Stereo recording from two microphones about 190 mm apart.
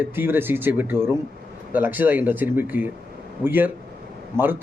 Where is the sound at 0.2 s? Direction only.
10° right (ahead or behind).